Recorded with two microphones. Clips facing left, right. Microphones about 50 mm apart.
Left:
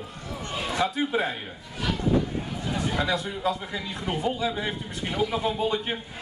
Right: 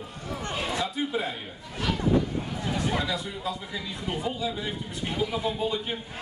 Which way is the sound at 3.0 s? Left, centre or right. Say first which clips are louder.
Left 4 dB; left.